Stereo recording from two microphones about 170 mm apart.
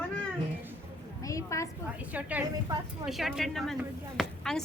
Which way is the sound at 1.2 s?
20° left (ahead or behind).